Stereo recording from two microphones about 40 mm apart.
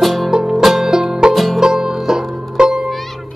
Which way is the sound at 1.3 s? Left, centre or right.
Centre.